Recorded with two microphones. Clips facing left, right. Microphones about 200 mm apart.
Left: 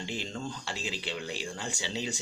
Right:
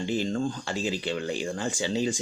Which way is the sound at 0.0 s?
50° right (ahead or behind).